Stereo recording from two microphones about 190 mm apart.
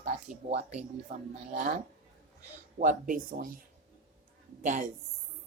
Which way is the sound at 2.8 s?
45° right (ahead or behind).